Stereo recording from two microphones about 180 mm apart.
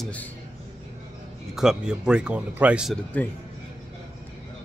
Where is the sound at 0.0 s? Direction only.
10° left (ahead or behind).